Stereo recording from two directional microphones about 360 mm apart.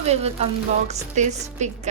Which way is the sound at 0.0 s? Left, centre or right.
Centre.